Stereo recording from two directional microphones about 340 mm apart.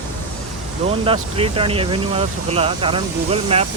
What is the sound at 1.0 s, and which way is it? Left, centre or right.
Speech, centre.